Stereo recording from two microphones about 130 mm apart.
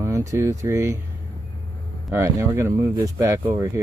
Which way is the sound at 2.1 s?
20° right (ahead or behind).